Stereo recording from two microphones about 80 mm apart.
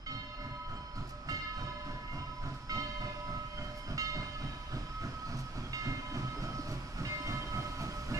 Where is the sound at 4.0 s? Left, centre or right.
Right.